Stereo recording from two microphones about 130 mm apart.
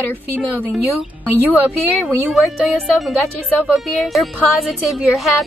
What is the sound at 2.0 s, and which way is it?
Speech, centre (ahead or behind).